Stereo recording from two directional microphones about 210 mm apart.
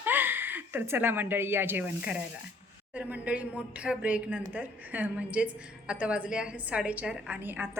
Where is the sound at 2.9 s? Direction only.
5° right (ahead or behind).